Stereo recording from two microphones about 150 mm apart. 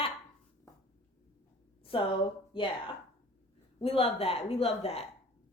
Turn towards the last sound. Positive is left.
turn(degrees=45)  # may be behind; listen again after turning